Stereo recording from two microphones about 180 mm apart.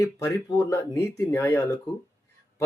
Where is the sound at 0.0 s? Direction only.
20° left (ahead or behind).